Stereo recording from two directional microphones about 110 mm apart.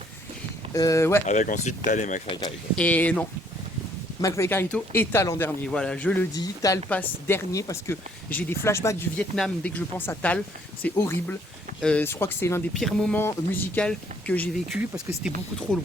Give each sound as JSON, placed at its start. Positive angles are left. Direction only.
{"t": 0.7, "sound": "speech", "side_deg": 30}
{"t": 1.3, "sound": "speech", "side_deg": 90}
{"t": 2.7, "sound": "speech", "side_deg": 15}
{"t": 4.2, "sound": "speech", "side_deg": 30}
{"t": 5.6, "sound": "speech", "side_deg": 5}
{"t": 6.3, "sound": "speech", "side_deg": 35}
{"t": 6.9, "sound": "speech", "side_deg": 20}
{"t": 9.1, "sound": "speech", "side_deg": 10}
{"t": 11.8, "sound": "speech", "side_deg": 10}
{"t": 12.0, "sound": "speech", "side_deg": 20}
{"t": 12.7, "sound": "speech", "side_deg": 5}
{"t": 13.1, "sound": "speech", "side_deg": 20}
{"t": 15.2, "sound": "speech", "side_deg": -10}